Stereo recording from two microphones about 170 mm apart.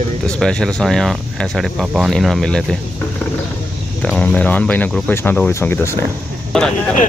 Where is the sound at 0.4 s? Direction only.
5° left (ahead or behind).